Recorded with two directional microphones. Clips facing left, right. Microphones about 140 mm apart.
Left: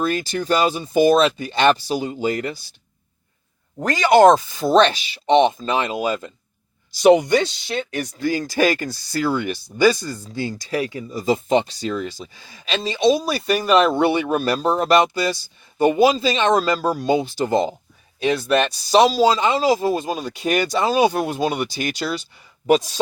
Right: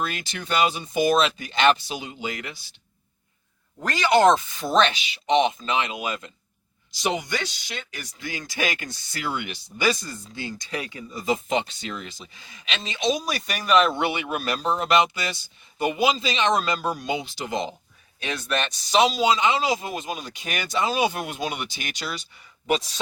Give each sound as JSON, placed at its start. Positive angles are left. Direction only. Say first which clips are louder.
{"t": 0.0, "sound": "speech", "louder": "left 8 dB", "side_deg": 35}
{"t": 3.8, "sound": "speech", "louder": "left 6 dB", "side_deg": 40}
{"t": 7.0, "sound": "speech", "louder": "left 13 dB", "side_deg": 60}
{"t": 8.2, "sound": "speech", "louder": "left 10 dB", "side_deg": 40}